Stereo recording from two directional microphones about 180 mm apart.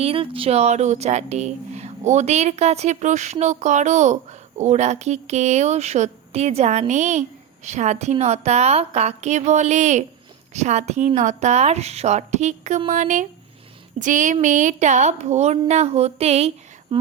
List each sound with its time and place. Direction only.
0.0 s a child's voice: 30° right (ahead or behind)
12.9 s a sound: 45° right (ahead or behind)
14.4 s a child's voice: 45° right (ahead or behind)